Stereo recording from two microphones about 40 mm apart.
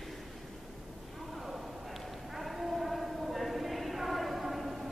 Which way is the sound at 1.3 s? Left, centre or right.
Centre.